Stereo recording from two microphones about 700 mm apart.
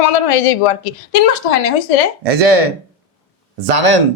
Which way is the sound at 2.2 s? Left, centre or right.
Right.